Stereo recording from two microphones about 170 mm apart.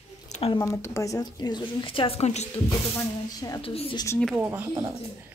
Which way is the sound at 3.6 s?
35° left (ahead or behind).